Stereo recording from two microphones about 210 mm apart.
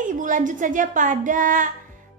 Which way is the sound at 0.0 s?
40° right (ahead or behind).